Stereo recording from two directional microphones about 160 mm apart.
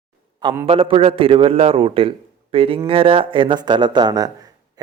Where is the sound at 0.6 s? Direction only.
35° right (ahead or behind).